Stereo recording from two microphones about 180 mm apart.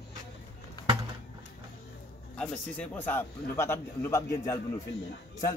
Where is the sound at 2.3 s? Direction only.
5° left (ahead or behind).